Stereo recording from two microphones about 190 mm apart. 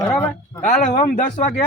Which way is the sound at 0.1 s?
5° left (ahead or behind).